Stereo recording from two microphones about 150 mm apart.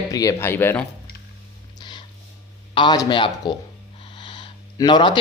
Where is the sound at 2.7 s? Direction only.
30° left (ahead or behind).